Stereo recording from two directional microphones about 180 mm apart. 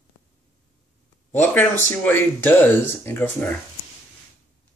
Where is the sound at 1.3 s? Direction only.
10° left (ahead or behind).